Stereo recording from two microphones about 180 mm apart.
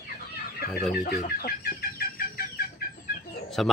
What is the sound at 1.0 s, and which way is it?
Chicken, 55° left (ahead or behind).